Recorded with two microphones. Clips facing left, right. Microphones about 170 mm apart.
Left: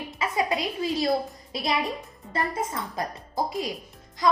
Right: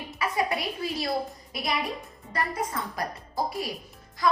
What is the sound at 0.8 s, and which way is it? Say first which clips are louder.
Speech: left 4 dB; 25° left (ahead or behind).